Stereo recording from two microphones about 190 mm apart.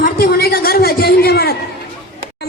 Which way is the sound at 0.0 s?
55° left (ahead or behind).